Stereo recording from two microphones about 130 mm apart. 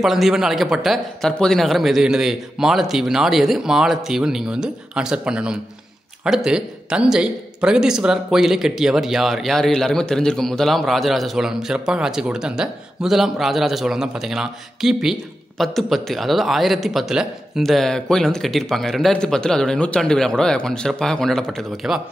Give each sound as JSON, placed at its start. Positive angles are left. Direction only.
{"t": 0.0, "sound": "speech", "side_deg": 0}